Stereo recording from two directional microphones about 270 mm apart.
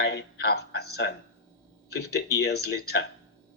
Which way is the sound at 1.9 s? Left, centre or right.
Left.